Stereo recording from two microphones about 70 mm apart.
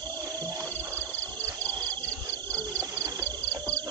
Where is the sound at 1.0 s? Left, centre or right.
Left.